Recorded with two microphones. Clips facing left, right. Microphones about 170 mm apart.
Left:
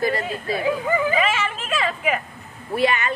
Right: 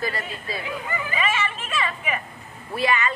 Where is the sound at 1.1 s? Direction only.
90° left.